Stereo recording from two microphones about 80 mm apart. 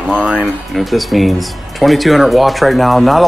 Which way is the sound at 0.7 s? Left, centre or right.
Centre.